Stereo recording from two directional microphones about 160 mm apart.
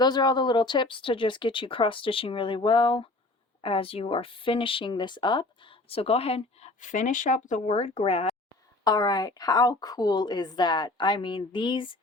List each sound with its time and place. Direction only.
0.0 s speech: 25° left (ahead or behind)
8.8 s a woman's voice: 25° left (ahead or behind)